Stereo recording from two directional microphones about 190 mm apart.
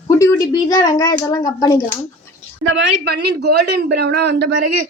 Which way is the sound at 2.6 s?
70° right (ahead or behind).